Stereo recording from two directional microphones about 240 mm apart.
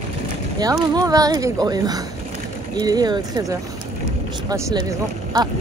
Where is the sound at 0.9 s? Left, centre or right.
Centre.